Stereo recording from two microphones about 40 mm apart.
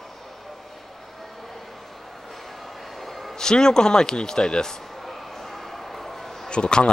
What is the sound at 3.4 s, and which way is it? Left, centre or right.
Speech, centre.